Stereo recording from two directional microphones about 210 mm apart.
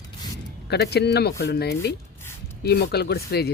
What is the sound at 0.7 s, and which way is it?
Speech, 50° left (ahead or behind).